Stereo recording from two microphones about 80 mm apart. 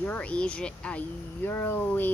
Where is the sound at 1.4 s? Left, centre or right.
Left.